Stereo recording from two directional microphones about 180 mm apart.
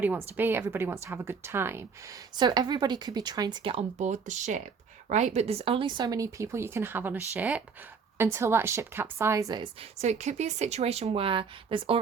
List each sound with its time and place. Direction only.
0.0 s a woman's voice: 10° right (ahead or behind)
10.0 s a woman's voice: 40° right (ahead or behind)